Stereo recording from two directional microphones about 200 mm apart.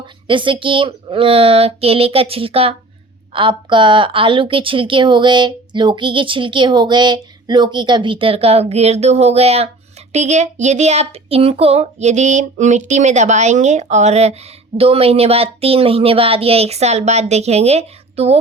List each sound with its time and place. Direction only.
0.3 s a woman's voice: 25° right (ahead or behind)